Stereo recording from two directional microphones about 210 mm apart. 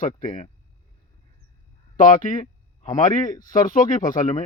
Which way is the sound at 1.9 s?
40° left (ahead or behind).